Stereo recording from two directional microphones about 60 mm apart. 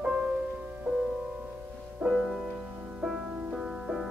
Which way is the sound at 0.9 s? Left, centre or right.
Centre.